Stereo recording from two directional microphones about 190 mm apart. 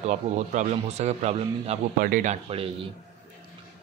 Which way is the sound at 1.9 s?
50° right (ahead or behind).